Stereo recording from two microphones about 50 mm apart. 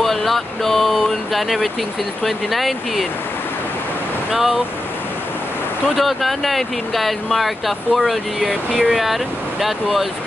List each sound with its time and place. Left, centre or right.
0.0 s a sound: centre
0.9 s speech: centre
4.3 s speech: centre
5.9 s speech: centre